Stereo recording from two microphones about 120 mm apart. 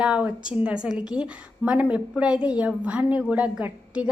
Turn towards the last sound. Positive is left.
turn(degrees=-10)  # may be behind; listen again after turning